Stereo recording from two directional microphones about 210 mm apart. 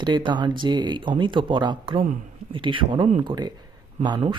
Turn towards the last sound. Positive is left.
turn(degrees=-20)  # may be behind; listen again after turning